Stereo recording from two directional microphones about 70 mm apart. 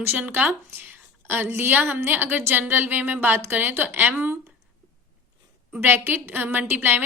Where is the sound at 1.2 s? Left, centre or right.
Right.